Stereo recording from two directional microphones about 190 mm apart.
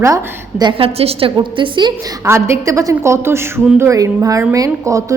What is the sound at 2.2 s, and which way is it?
A man's voice, 15° right (ahead or behind).